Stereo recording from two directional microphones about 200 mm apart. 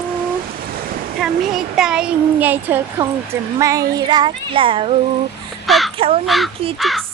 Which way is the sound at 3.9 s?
20° right (ahead or behind).